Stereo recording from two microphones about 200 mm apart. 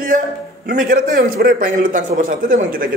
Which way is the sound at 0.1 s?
40° right (ahead or behind).